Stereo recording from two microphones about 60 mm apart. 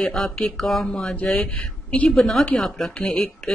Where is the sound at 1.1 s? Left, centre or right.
Centre.